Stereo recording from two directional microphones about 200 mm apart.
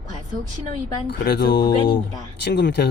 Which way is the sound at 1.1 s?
55° left (ahead or behind).